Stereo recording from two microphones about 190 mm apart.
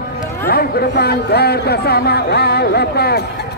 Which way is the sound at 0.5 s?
55° left (ahead or behind).